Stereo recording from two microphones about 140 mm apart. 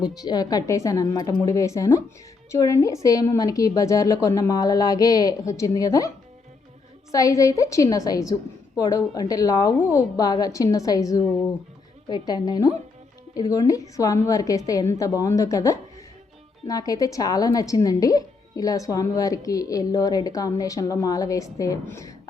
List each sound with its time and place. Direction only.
0.0 s speech: 30° left (ahead or behind)
1.5 s speech: 20° left (ahead or behind)
7.1 s speech: 25° left (ahead or behind)